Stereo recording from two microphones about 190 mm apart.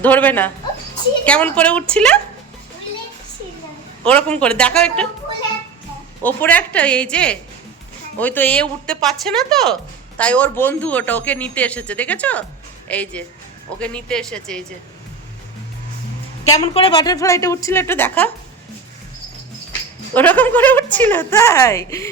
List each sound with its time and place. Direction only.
0.0 s a man's voice: 10° left (ahead or behind)
4.0 s speech: 5° left (ahead or behind)
6.2 s a man's voice: 10° left (ahead or behind)
16.6 s a man's voice: 30° left (ahead or behind); by 18.3 s 10° left (ahead or behind)
20.1 s a man's voice: 10° left (ahead or behind)